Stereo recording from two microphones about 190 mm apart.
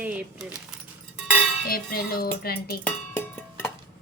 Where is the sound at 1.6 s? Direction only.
50° left (ahead or behind).